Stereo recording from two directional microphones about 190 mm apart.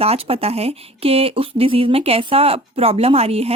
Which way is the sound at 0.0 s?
30° right (ahead or behind).